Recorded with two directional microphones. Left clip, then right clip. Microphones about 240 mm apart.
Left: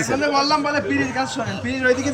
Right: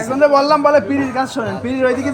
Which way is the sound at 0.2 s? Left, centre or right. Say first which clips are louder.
Right 10 dB; right.